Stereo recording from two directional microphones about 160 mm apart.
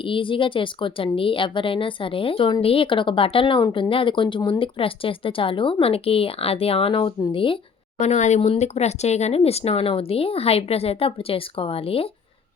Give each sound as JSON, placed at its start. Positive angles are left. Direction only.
{"t": 0.0, "sound": "a woman's voice", "side_deg": 30}